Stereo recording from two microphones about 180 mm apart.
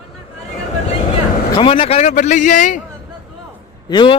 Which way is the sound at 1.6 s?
30° left (ahead or behind).